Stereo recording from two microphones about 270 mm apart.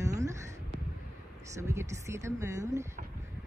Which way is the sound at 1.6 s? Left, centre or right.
Centre.